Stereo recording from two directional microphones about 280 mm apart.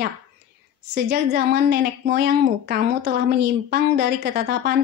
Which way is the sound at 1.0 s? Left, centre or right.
Right.